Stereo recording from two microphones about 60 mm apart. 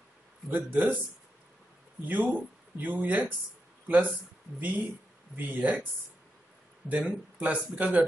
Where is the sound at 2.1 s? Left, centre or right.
Right.